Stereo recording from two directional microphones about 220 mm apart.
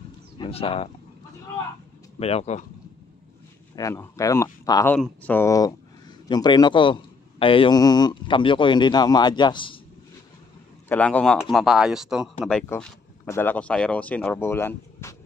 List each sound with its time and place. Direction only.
0.4 s speech: 25° left (ahead or behind)
2.1 s speech: 25° left (ahead or behind)
3.7 s speech: 10° left (ahead or behind)
10.9 s speech: 5° left (ahead or behind)